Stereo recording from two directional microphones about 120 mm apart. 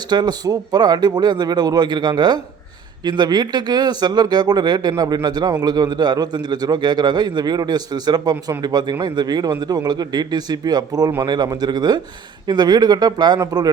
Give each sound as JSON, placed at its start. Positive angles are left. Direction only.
{"t": 0.1, "sound": "speech", "side_deg": -35}